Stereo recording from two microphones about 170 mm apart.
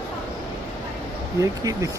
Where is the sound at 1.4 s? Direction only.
20° right (ahead or behind).